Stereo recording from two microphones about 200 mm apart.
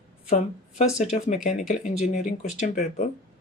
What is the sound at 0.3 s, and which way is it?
Speech, 35° left (ahead or behind).